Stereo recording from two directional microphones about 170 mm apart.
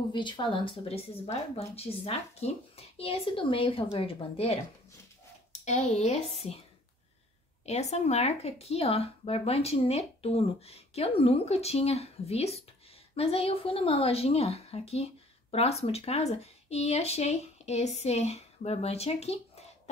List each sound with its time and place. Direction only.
0.1 s speech: 30° left (ahead or behind)
7.6 s speech: 40° left (ahead or behind)